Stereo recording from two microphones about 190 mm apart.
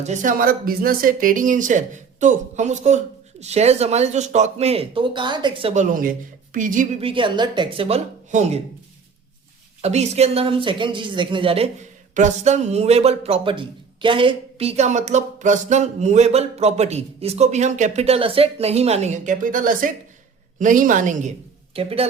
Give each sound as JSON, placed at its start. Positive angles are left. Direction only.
{"t": 0.0, "sound": "a man's voice", "side_deg": -40}
{"t": 5.7, "sound": "speech", "side_deg": -45}
{"t": 7.0, "sound": "speech", "side_deg": -25}
{"t": 9.8, "sound": "a man's voice", "side_deg": -35}